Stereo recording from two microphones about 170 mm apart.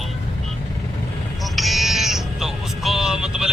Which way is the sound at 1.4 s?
Centre (ahead or behind).